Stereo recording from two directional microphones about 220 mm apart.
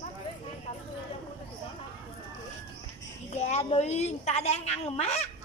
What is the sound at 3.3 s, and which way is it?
Speech, 30° left (ahead or behind).